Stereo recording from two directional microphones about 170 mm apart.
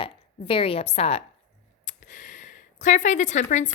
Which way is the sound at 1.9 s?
50° left (ahead or behind).